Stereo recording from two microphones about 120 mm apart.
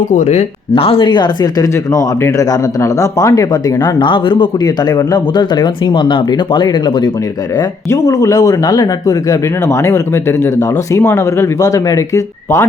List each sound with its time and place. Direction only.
0.0 s speech: 90° left
0.7 s speech: 50° left (ahead or behind)
7.9 s speech: 30° left (ahead or behind)